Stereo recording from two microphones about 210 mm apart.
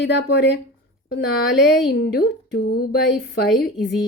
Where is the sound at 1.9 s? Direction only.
45° left (ahead or behind).